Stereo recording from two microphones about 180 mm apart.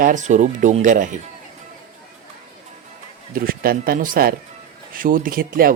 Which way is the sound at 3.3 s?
55° right (ahead or behind).